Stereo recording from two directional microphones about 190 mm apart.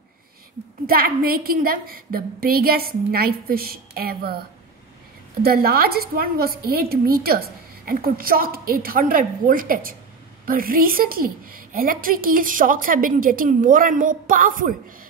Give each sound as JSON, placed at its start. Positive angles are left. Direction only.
{"t": 0.8, "sound": "a woman's voice", "side_deg": -50}
{"t": 5.4, "sound": "a woman's voice", "side_deg": -55}